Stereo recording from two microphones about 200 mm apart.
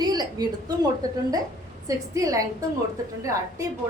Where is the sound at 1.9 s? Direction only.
15° right (ahead or behind).